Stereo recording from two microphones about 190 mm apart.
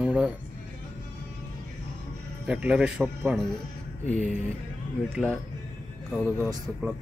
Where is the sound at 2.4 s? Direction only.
5° right (ahead or behind).